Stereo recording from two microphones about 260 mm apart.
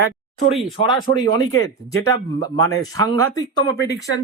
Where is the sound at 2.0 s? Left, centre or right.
Right.